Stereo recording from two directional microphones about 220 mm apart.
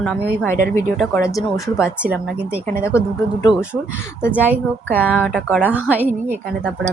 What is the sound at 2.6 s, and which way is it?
Speech, 10° left (ahead or behind).